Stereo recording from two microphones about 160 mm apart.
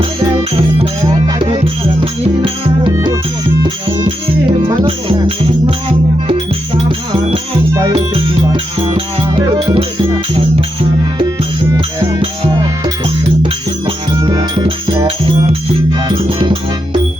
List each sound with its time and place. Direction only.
1.0 s music: 30° right (ahead or behind)
2.9 s music: 20° right (ahead or behind)
4.9 s music: 35° right (ahead or behind)
7.7 s music: 20° right (ahead or behind)
7.9 s music: 35° right (ahead or behind)
11.7 s music: 20° right (ahead or behind)
14.2 s music: 20° right (ahead or behind)
14.5 s music: 35° right (ahead or behind)